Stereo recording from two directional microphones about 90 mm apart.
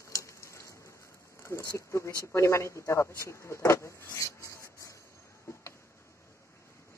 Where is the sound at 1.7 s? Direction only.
35° left (ahead or behind).